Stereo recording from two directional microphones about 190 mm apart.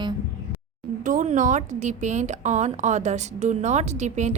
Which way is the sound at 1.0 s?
45° right (ahead or behind).